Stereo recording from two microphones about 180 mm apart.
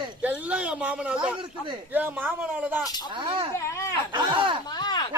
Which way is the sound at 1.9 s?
10° right (ahead or behind).